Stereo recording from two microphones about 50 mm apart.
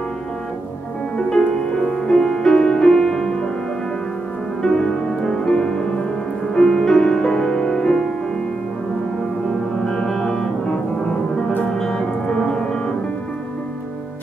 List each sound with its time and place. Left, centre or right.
1.1 s music: centre
4.7 s music: centre
9.8 s music: centre